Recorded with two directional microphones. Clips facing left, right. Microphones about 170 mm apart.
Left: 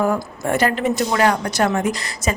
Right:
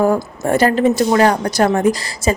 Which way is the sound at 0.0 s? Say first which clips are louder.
Right 4 dB; 35° right (ahead or behind).